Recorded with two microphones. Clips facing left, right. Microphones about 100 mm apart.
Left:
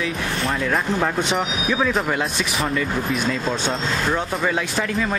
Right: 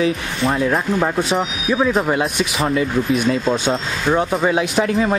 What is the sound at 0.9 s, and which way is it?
Speech, 10° right (ahead or behind).